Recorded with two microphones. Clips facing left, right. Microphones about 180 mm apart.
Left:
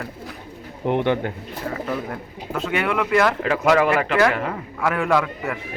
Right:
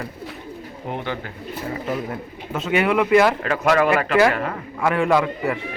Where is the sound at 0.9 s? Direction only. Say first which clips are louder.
Left 8 dB; 60° left (ahead or behind).